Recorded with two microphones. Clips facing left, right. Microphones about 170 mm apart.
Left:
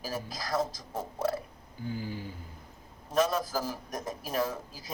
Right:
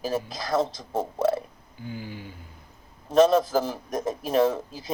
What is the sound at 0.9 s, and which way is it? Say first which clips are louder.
Speech: right 8 dB; 90° right.